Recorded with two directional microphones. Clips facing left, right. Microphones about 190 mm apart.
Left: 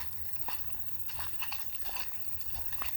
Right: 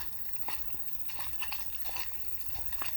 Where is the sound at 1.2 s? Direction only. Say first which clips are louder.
Even; 5° right (ahead or behind).